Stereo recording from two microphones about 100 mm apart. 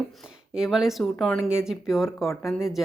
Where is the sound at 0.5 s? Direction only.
5° right (ahead or behind).